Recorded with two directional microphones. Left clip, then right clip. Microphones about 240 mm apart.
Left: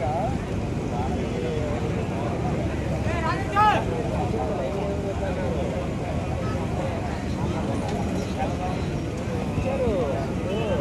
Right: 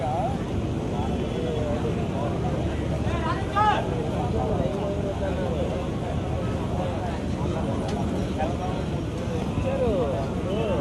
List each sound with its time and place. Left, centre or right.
3.2 s vehicle: left